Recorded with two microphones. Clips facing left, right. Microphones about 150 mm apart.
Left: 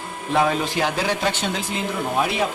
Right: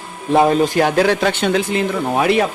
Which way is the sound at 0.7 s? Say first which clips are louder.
Right 8 dB; 55° right (ahead or behind).